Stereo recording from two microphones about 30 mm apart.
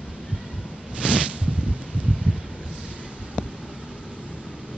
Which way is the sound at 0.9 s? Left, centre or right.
Right.